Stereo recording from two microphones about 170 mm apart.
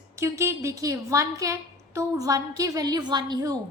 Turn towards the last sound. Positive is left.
turn(degrees=-25)  # may be behind; listen again after turning